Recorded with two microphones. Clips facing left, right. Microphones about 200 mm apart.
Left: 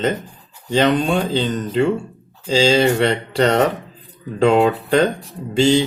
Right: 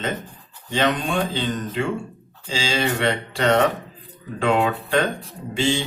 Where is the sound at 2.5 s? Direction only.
40° left (ahead or behind).